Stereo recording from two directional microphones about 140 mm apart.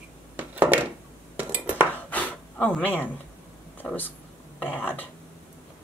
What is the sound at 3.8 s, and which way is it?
Speech, 15° left (ahead or behind).